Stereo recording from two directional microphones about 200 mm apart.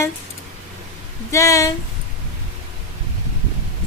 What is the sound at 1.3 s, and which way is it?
Speech, 15° left (ahead or behind).